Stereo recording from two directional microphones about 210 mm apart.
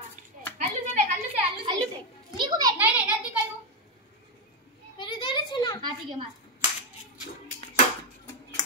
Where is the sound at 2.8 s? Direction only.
5° right (ahead or behind).